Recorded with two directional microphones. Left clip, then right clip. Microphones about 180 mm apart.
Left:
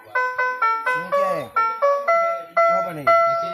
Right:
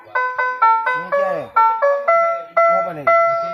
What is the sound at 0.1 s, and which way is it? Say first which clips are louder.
Music: right 2 dB; 50° left (ahead or behind).